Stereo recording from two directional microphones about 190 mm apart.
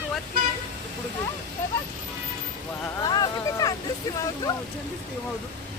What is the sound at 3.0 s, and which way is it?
Speech, 20° left (ahead or behind).